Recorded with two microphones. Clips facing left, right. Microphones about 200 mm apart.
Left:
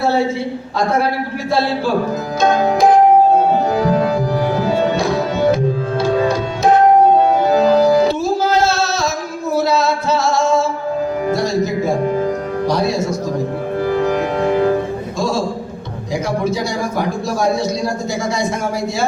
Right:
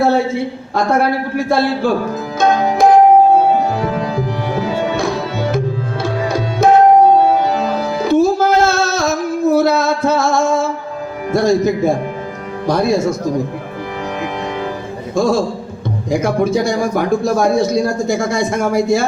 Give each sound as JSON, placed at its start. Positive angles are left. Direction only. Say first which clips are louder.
{"t": 1.5, "sound": "speech", "louder": "right 1 dB", "side_deg": -50}
{"t": 8.0, "sound": "music", "louder": "right 4 dB", "side_deg": -50}
{"t": 11.3, "sound": "speech", "louder": "right 8 dB", "side_deg": -55}
{"t": 16.2, "sound": "speech", "louder": "right 4 dB", "side_deg": -50}